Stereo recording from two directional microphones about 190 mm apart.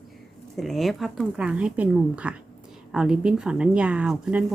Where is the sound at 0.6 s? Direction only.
Centre (ahead or behind).